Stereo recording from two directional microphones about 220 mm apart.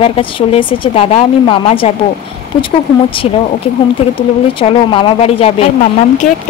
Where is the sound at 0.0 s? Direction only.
25° left (ahead or behind).